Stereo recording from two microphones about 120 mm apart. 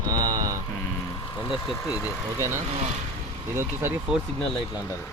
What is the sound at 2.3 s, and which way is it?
Speech, 20° right (ahead or behind).